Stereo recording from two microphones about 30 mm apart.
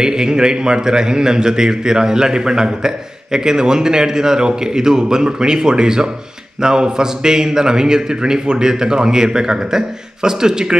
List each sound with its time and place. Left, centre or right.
0.0 s a man's voice: right